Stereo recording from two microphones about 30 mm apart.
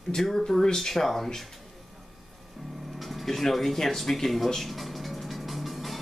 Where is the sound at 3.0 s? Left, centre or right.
Centre.